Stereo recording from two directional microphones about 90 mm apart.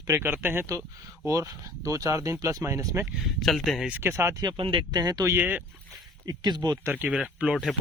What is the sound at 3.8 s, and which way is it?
Speech, 25° right (ahead or behind).